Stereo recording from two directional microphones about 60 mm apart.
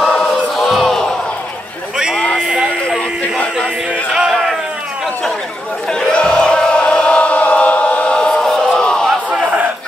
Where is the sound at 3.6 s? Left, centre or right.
Centre.